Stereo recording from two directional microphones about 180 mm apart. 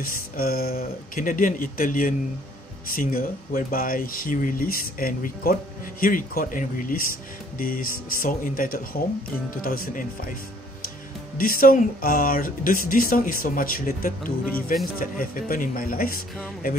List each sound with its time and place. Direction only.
0.0 s speech: 55° left (ahead or behind)
11.3 s speech: 50° left (ahead or behind)